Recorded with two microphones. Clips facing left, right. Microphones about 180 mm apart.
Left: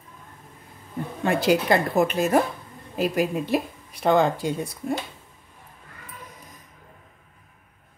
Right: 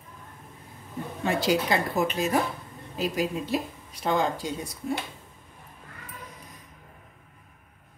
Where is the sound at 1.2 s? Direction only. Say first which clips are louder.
Left 4 dB; 55° left (ahead or behind).